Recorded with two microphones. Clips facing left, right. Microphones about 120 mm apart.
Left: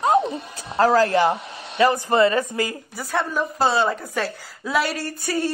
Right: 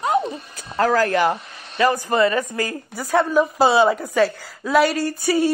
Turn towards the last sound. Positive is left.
turn(degrees=-5)  # may be behind; listen again after turning